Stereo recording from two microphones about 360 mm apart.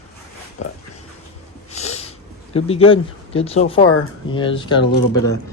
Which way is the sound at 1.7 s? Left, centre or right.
Centre.